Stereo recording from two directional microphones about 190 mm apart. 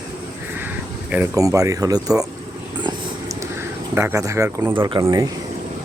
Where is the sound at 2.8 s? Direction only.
20° right (ahead or behind).